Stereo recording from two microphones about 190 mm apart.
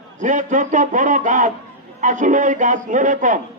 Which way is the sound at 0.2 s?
40° right (ahead or behind).